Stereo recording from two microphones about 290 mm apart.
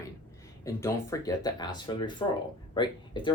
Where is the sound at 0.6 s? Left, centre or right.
Centre.